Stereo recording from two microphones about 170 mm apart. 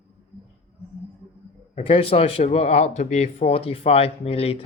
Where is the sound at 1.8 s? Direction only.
30° left (ahead or behind).